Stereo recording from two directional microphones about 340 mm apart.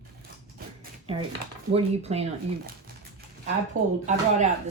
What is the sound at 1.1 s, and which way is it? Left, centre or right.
Speech, centre.